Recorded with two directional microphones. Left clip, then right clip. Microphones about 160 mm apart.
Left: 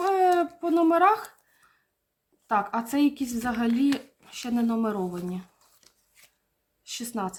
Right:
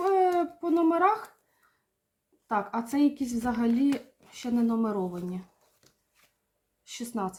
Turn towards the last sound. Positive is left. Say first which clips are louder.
# left 2 dB
turn(degrees=25)  # may be behind; listen again after turning